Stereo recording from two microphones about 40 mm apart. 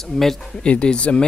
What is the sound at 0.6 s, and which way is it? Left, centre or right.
Speech, left.